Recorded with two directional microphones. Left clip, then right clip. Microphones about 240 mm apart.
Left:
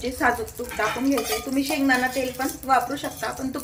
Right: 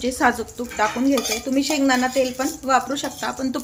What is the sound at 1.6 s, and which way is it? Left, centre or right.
Speech, right.